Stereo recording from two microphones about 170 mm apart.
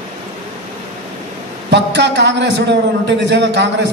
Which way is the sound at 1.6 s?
90° right.